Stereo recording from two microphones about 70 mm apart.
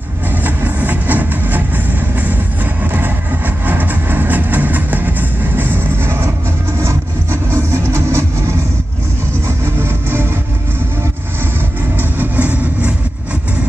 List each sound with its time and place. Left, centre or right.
0.4 s music: right
2.1 s vehicle: right
7.5 s music: right
12.0 s vehicle: right